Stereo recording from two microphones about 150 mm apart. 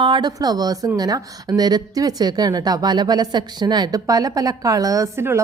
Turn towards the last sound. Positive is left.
turn(degrees=-15)  # may be behind; listen again after turning